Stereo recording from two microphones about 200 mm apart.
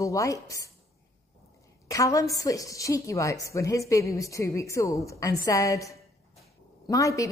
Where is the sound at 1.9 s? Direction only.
15° left (ahead or behind).